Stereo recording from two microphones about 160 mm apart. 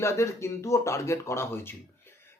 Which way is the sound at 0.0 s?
20° left (ahead or behind).